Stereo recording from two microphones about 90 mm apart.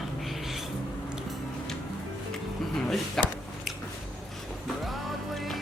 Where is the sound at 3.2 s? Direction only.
5° left (ahead or behind).